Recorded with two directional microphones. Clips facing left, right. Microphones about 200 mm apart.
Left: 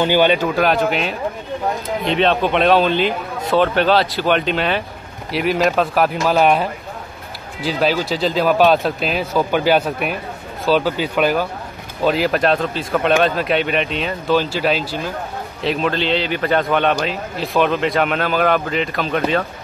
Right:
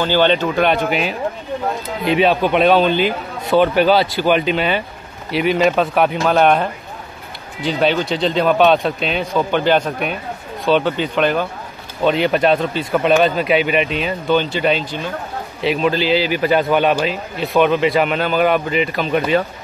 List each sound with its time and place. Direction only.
0.0 s a man's voice: 10° left (ahead or behind); by 19.4 s 5° right (ahead or behind)